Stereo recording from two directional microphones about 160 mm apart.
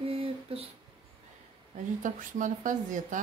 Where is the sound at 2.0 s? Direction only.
55° right (ahead or behind).